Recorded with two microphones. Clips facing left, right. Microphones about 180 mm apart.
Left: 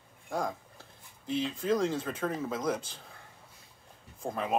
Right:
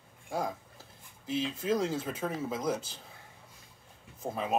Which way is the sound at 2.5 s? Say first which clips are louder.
Even; 25° right (ahead or behind).